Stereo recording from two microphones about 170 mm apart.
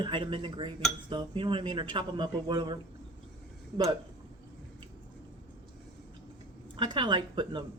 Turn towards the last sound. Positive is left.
turn(degrees=-25)  # may be behind; listen again after turning